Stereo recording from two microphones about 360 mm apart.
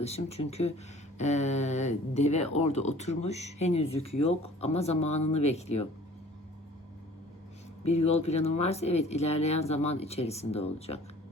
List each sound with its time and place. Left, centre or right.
0.0 s speech: centre
7.9 s speech: centre